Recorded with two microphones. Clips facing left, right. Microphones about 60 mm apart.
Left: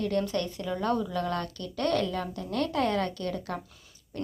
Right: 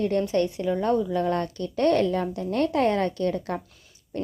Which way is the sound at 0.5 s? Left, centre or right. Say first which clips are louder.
Right 5 dB; right.